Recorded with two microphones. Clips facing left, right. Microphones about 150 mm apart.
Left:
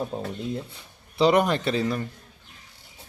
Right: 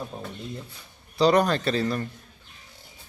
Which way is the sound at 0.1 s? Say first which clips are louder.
Left 6 dB; 20° left (ahead or behind).